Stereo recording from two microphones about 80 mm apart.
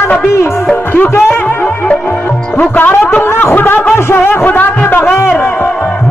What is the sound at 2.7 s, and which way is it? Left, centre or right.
A man's voice, left.